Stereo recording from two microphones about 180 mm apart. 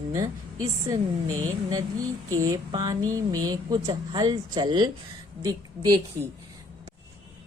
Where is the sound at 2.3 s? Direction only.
20° right (ahead or behind).